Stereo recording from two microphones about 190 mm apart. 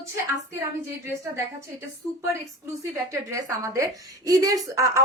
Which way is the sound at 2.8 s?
15° right (ahead or behind).